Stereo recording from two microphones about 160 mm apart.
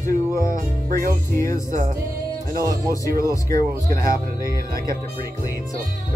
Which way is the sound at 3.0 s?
20° left (ahead or behind).